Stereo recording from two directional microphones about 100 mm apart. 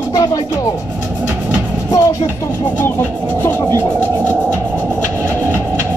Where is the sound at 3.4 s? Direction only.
25° left (ahead or behind).